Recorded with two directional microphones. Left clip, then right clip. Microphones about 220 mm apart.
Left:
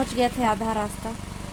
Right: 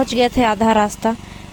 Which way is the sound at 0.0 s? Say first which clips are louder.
Right 8 dB; 40° right (ahead or behind).